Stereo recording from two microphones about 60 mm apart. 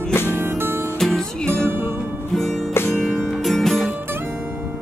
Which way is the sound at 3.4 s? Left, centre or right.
Centre.